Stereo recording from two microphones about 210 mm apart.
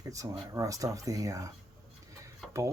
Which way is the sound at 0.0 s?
15° right (ahead or behind).